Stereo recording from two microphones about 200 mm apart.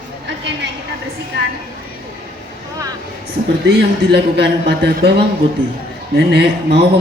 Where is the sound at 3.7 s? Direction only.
55° right (ahead or behind).